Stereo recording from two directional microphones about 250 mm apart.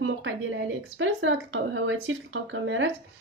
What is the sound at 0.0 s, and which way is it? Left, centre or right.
A woman's voice, right.